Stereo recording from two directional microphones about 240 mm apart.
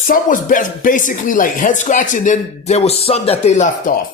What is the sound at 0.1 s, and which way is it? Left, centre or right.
Speech, left.